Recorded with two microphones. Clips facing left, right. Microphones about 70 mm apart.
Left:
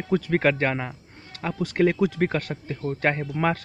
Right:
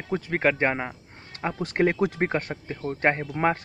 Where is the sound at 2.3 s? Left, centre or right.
Right.